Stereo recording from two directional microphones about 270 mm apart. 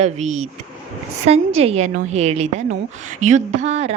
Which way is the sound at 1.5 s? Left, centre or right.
Right.